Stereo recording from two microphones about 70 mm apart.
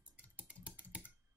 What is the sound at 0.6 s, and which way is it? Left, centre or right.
Typing, centre.